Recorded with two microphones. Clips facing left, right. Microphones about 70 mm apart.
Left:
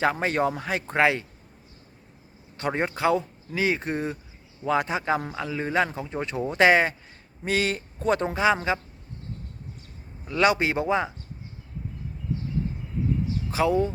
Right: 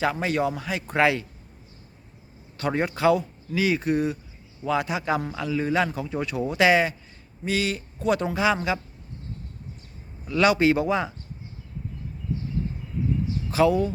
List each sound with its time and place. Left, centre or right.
0.0 s a man's voice: left
0.9 s speech: left
2.6 s a man's voice: left
10.2 s speech: left
13.5 s speech: left